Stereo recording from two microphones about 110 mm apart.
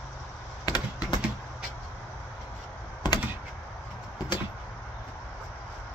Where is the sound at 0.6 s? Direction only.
35° left (ahead or behind).